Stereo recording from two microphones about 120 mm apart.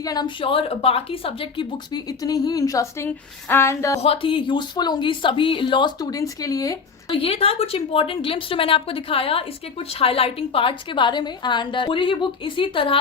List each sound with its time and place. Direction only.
0.0 s a woman's voice: 35° left (ahead or behind); by 1.6 s 50° left (ahead or behind)
1.9 s a woman's voice: 35° left (ahead or behind)
3.5 s a sound: 20° left (ahead or behind)
4.0 s a woman's voice: 50° left (ahead or behind); by 6.7 s 30° left (ahead or behind)
7.2 s a woman's voice: 55° left (ahead or behind)